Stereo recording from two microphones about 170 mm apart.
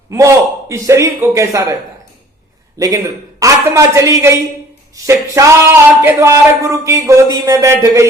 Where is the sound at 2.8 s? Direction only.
20° right (ahead or behind).